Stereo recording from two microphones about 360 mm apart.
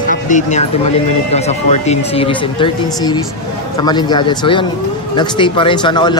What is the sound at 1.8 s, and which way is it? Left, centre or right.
Speech, centre.